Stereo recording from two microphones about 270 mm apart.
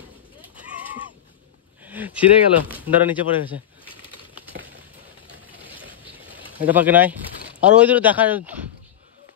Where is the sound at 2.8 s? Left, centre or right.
Centre.